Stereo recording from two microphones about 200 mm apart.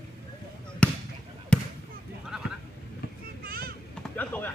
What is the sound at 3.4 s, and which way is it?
Boat, 45° right (ahead or behind).